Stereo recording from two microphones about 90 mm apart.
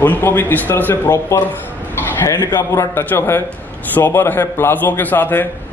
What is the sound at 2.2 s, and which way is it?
A man's voice, 35° left (ahead or behind).